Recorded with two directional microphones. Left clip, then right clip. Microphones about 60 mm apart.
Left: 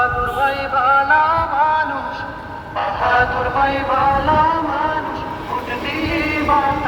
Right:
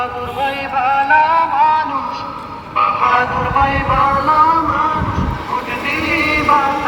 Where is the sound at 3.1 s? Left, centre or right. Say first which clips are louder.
Right 2 dB; centre.